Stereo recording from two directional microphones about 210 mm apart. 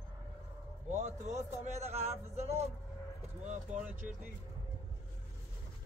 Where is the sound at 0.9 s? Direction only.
35° right (ahead or behind).